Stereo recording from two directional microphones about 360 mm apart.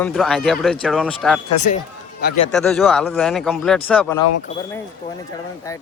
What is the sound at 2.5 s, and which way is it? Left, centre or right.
Speech, centre.